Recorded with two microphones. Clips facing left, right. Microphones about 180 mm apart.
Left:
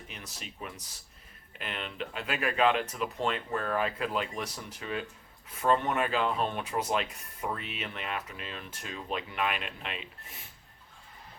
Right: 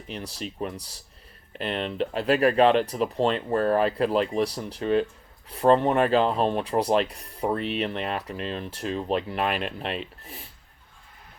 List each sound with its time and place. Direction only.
0.1 s speech: 35° right (ahead or behind)